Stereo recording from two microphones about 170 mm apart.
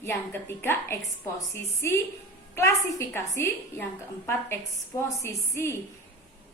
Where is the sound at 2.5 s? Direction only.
15° left (ahead or behind).